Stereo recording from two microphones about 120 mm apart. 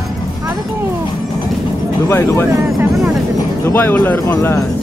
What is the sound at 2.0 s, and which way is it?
Speech, 20° left (ahead or behind).